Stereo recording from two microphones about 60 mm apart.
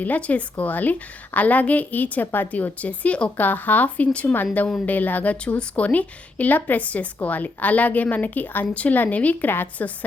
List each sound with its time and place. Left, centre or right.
0.0 s speech: left